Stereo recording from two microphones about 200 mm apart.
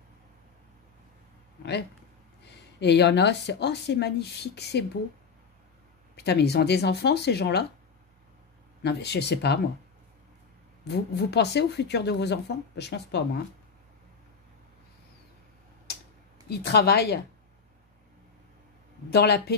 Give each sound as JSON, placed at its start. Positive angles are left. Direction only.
{"t": 2.4, "sound": "a woman's voice", "side_deg": 60}
{"t": 6.1, "sound": "a woman's voice", "side_deg": 55}
{"t": 8.8, "sound": "a woman's voice", "side_deg": 55}
{"t": 10.9, "sound": "a woman's voice", "side_deg": 55}
{"t": 16.4, "sound": "speech", "side_deg": 55}
{"t": 19.0, "sound": "speech", "side_deg": 55}